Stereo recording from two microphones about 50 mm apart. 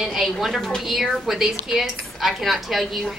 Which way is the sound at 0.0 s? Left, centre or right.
Centre.